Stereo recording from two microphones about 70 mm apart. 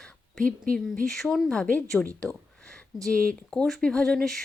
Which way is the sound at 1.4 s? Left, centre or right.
Centre.